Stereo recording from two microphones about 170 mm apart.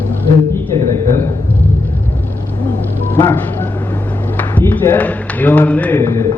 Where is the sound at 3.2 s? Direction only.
15° left (ahead or behind).